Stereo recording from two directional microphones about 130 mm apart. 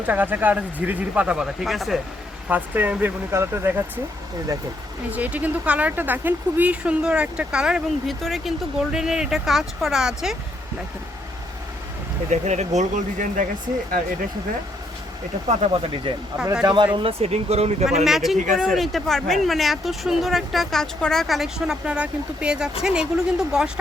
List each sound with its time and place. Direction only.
0.0 s speech: 15° right (ahead or behind)
2.5 s speech: 15° right (ahead or behind)
5.1 s speech: 10° right (ahead or behind)
12.3 s speech: 60° right (ahead or behind); by 13.5 s 80° right
15.6 s speech: 55° right (ahead or behind)
16.1 s speech: 40° right (ahead or behind)
18.0 s speech: centre (ahead or behind)
18.3 s speech: 80° right
18.6 s speech: centre (ahead or behind)